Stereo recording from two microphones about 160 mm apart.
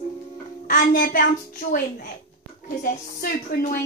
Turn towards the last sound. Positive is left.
turn(degrees=60)  # may be behind; listen again after turning